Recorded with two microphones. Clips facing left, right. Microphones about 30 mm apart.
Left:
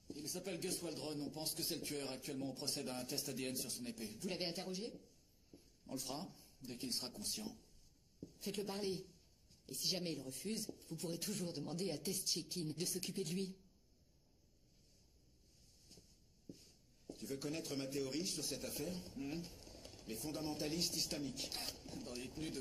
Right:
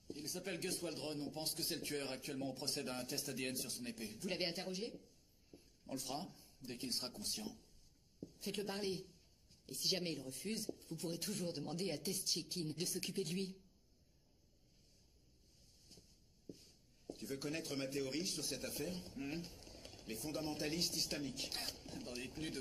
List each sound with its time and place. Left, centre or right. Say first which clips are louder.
0.4 s speech: right 1 dB; centre
3.8 s speech: even; centre
5.5 s a sound: right 1 dB; right
5.9 s a woman's voice: right 1 dB; centre
10.6 s speech: right 2 dB; centre
12.0 s speech: right 1 dB; centre
12.4 s speech: even; centre
16.4 s a sound: right 2 dB; centre
17.9 s speech: even; centre
19.7 s a sound: right 1 dB; centre
20.2 s speech: right 1 dB; centre
20.8 s speech: right 1 dB; centre
21.1 s speech: right 1 dB; right